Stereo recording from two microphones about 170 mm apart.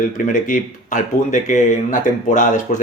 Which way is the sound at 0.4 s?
50° left (ahead or behind).